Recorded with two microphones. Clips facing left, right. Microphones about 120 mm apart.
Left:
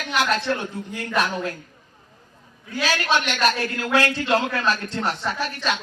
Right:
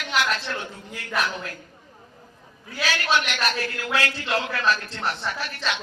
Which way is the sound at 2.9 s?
40° left (ahead or behind).